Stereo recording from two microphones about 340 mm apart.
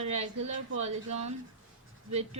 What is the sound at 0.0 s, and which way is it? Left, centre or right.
A woman's voice, centre.